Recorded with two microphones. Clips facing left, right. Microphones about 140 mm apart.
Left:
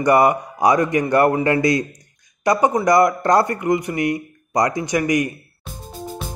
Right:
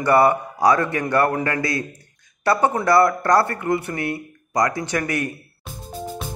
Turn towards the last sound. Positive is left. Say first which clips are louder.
# left 5 dB
turn(degrees=15)  # may be behind; listen again after turning